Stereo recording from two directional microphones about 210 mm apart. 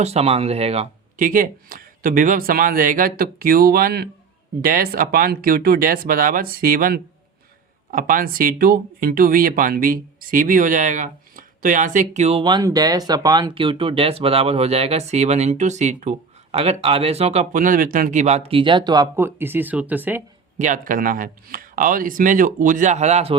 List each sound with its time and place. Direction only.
0.0 s speech: 30° right (ahead or behind); by 20.2 s 10° right (ahead or behind)
20.6 s speech: 40° right (ahead or behind)